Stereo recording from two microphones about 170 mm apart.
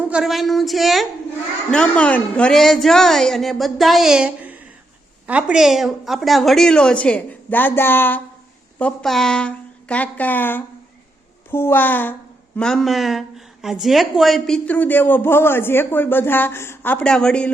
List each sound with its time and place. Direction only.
0.0 s a woman's voice: 5° right (ahead or behind)